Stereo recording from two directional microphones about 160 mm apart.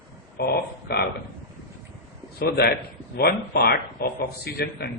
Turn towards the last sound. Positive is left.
turn(degrees=90)